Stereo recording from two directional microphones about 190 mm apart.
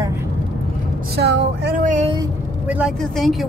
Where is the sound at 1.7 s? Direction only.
40° right (ahead or behind).